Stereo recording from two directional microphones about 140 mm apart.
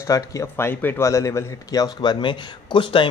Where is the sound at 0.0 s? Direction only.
25° left (ahead or behind).